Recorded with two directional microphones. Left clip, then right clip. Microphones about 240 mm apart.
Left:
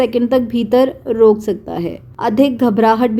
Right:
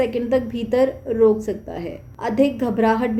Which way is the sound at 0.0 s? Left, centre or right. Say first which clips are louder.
Left 6 dB; left.